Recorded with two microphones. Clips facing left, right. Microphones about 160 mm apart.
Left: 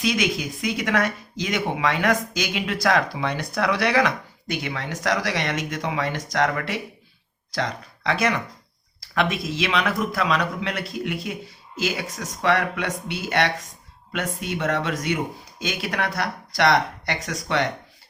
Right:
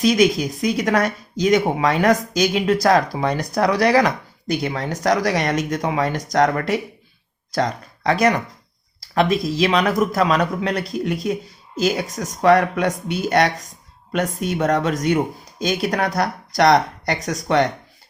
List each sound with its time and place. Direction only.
0.0 s speech: 40° right (ahead or behind)